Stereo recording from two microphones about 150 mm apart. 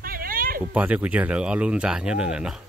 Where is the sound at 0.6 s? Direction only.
10° right (ahead or behind).